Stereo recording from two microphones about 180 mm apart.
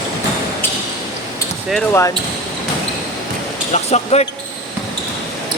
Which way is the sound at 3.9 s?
35° left (ahead or behind).